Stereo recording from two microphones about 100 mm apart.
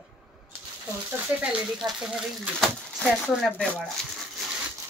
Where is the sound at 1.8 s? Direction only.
Centre (ahead or behind).